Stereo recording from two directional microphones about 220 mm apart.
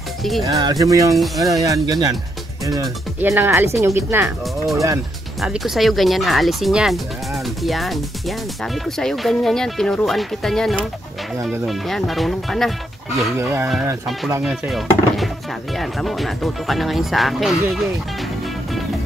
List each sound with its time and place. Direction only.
0.2 s speech: centre (ahead or behind)
0.6 s speech: 15° right (ahead or behind)
1.1 s speech: centre (ahead or behind)
1.7 s speech: 15° right (ahead or behind); by 12.7 s centre (ahead or behind)
13.4 s speech: 10° right (ahead or behind)
14.4 s speech: centre (ahead or behind)